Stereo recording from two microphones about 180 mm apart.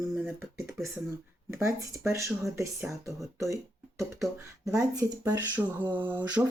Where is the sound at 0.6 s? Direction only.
15° right (ahead or behind).